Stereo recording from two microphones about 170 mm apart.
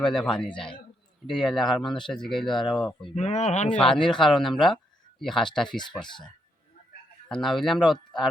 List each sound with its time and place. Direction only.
0.0 s speech: 5° left (ahead or behind)
3.0 s speech: 40° left (ahead or behind)
3.7 s speech: 5° left (ahead or behind)
7.3 s speech: centre (ahead or behind)